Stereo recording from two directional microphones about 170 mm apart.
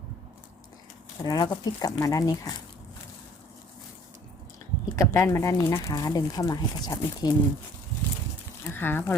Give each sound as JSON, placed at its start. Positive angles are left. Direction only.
{"t": 1.2, "sound": "speech", "side_deg": 25}
{"t": 4.9, "sound": "speech", "side_deg": 15}
{"t": 8.7, "sound": "speech", "side_deg": 10}